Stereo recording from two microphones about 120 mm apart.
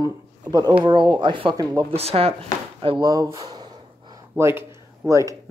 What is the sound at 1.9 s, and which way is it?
Speech, 55° right (ahead or behind).